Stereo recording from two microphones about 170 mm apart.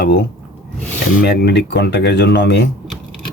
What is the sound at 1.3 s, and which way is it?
Speech, 85° left.